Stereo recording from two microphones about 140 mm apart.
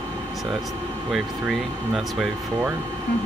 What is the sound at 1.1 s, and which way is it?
Speech, 5° right (ahead or behind).